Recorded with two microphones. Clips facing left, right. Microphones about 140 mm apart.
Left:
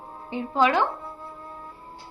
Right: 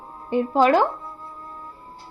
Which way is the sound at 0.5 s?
40° right (ahead or behind).